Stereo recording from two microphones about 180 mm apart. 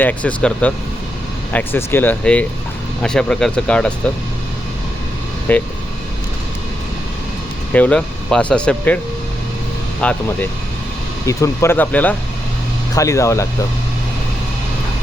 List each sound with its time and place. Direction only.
0.0 s speech: 10° left (ahead or behind)
5.5 s speech: 10° left (ahead or behind)
7.7 s speech: 5° left (ahead or behind)
10.0 s speech: 5° left (ahead or behind)